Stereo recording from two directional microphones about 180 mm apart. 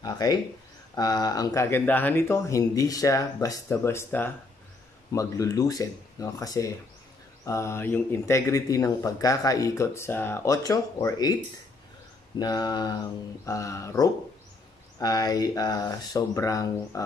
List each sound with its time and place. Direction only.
0.0 s speech: 20° left (ahead or behind)
12.4 s speech: 20° left (ahead or behind)